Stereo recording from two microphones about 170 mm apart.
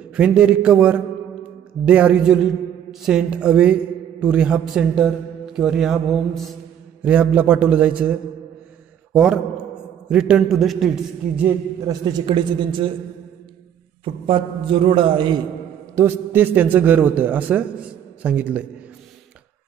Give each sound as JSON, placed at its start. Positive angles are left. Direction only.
{"t": 0.1, "sound": "a man's voice", "side_deg": -5}
{"t": 11.3, "sound": "a man's voice", "side_deg": -10}
{"t": 11.9, "sound": "a man's voice", "side_deg": -25}
{"t": 14.0, "sound": "a man's voice", "side_deg": -30}
{"t": 15.9, "sound": "a man's voice", "side_deg": -15}